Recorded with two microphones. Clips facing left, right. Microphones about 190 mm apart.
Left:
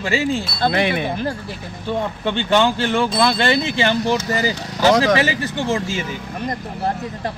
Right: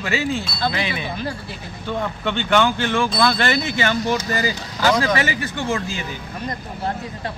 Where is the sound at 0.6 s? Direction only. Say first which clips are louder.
Left 8 dB; 55° left (ahead or behind).